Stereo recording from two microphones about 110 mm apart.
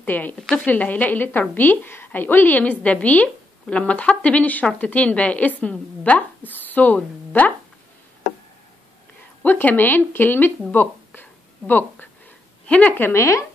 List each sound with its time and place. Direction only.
0.0 s a woman's voice: 15° left (ahead or behind)
9.4 s a woman's voice: 15° left (ahead or behind)
10.7 s a sound: 15° left (ahead or behind)
12.6 s a woman's voice: 10° left (ahead or behind)